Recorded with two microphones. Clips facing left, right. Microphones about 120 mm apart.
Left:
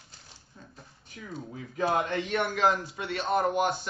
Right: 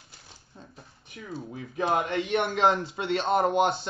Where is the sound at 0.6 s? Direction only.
20° right (ahead or behind).